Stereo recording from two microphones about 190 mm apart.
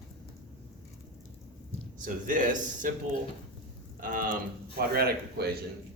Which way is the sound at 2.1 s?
45° right (ahead or behind).